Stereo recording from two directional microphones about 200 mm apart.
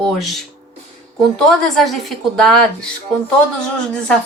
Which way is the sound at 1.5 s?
Centre (ahead or behind).